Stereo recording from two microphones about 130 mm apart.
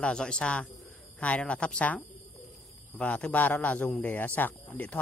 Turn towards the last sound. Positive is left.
turn(degrees=15)  # may be behind; listen again after turning